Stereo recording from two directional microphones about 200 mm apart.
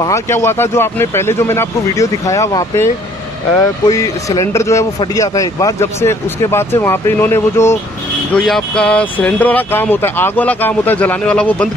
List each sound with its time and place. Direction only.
0.0 s speech: 15° left (ahead or behind)
8.3 s speech: centre (ahead or behind)